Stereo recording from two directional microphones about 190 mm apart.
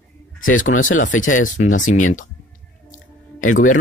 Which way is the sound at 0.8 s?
45° left (ahead or behind).